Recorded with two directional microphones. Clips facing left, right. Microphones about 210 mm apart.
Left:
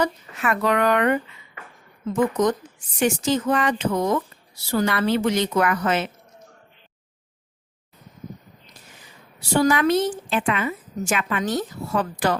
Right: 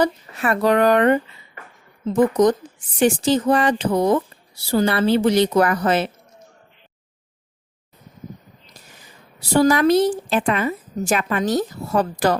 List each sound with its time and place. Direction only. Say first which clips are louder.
0.0 s a woman's voice: right 4 dB; 35° right (ahead or behind)
9.4 s a woman's voice: right 3 dB; 40° right (ahead or behind)